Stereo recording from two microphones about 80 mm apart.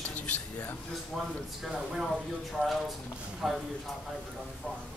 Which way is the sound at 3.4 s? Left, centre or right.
Centre.